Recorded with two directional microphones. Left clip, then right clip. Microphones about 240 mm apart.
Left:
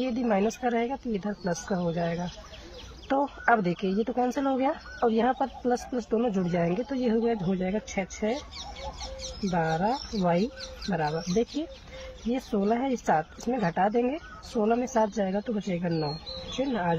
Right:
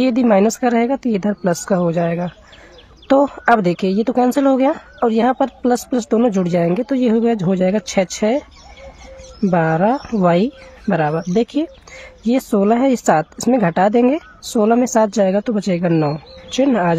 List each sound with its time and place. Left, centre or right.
0.0 s speech: right
9.4 s speech: right